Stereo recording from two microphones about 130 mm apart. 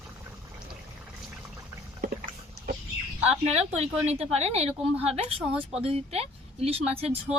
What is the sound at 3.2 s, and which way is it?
Speech, 50° right (ahead or behind).